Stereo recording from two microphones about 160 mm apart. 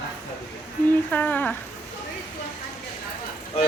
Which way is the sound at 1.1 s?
10° left (ahead or behind).